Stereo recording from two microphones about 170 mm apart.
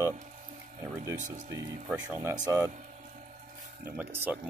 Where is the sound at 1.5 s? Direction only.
15° right (ahead or behind).